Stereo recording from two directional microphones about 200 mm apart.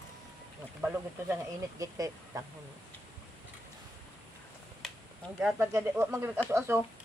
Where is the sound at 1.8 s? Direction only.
15° right (ahead or behind).